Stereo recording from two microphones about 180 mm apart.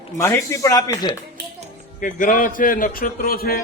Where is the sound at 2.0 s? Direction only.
45° left (ahead or behind).